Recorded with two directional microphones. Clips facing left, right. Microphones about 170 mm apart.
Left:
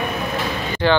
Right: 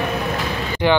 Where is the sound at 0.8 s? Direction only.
15° right (ahead or behind).